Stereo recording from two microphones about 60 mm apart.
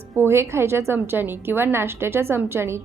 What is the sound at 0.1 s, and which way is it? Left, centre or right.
A woman's voice, right.